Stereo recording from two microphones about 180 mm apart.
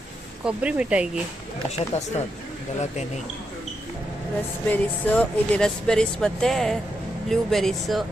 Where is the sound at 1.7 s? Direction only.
40° left (ahead or behind).